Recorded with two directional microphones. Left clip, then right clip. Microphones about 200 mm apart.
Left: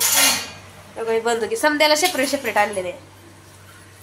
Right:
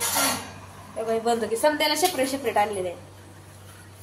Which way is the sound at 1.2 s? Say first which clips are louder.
Left 1 dB; 20° left (ahead or behind).